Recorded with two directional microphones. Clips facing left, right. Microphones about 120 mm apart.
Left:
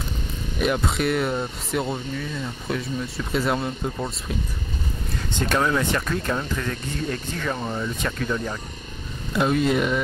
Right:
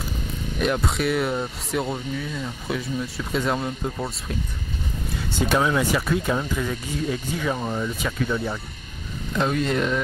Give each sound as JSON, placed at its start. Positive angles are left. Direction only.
{"t": 0.6, "sound": "speech", "side_deg": 0}
{"t": 9.3, "sound": "speech", "side_deg": 5}